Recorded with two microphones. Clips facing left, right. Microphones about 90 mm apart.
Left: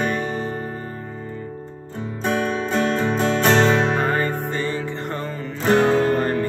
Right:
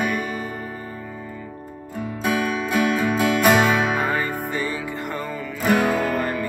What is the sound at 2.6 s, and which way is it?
Music, 10° right (ahead or behind).